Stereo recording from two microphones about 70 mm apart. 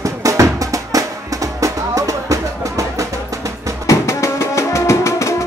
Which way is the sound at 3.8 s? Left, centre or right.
Left.